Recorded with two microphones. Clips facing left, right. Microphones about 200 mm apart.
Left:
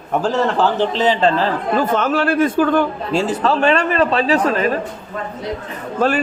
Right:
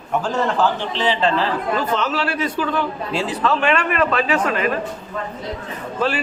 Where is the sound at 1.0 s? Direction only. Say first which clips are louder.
Left 2 dB; 45° left (ahead or behind).